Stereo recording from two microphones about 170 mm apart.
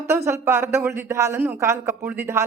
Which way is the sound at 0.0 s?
15° right (ahead or behind).